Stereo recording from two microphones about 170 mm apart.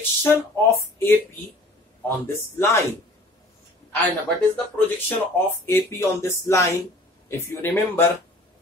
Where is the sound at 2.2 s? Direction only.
15° left (ahead or behind).